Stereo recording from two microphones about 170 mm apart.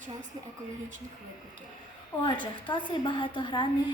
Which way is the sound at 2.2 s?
25° left (ahead or behind).